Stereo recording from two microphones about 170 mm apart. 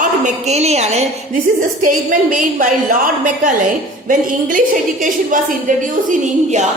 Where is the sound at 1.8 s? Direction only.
50° right (ahead or behind).